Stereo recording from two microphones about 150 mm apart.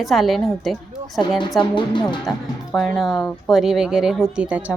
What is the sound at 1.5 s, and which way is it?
Speech, 30° left (ahead or behind).